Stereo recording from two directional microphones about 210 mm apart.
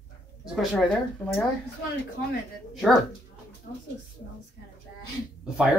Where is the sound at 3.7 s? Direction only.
50° left (ahead or behind).